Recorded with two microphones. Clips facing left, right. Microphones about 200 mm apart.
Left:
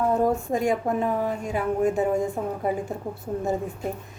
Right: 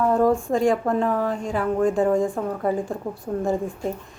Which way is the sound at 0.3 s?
20° left (ahead or behind).